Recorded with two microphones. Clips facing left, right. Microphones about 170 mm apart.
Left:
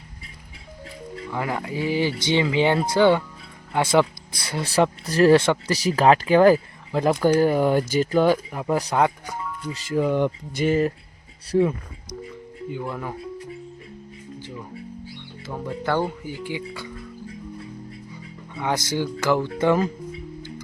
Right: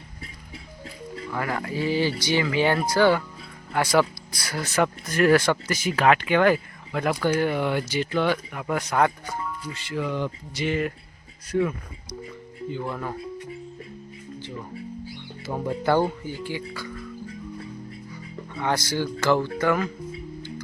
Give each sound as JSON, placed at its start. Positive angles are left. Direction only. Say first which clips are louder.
{"t": 1.3, "sound": "speech", "louder": "left 1 dB", "side_deg": 15}
{"t": 9.0, "sound": "speech", "louder": "right 2 dB", "side_deg": 15}
{"t": 9.9, "sound": "speech", "louder": "left 7 dB", "side_deg": 45}
{"t": 12.7, "sound": "speech", "louder": "even", "side_deg": 5}
{"t": 15.5, "sound": "speech", "louder": "right 2 dB", "side_deg": -10}
{"t": 16.2, "sound": "speech", "louder": "left 1 dB", "side_deg": 15}
{"t": 18.5, "sound": "speech", "louder": "left 1 dB", "side_deg": 15}
{"t": 19.5, "sound": "speech", "louder": "left 3 dB", "side_deg": 30}